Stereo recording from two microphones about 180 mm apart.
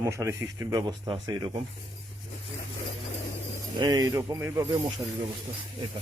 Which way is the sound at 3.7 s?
20° right (ahead or behind).